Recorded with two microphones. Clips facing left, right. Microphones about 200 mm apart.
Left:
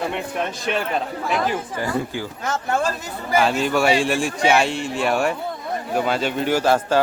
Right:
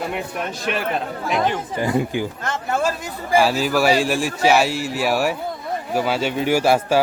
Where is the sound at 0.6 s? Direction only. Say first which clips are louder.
Right 1 dB; 5° right (ahead or behind).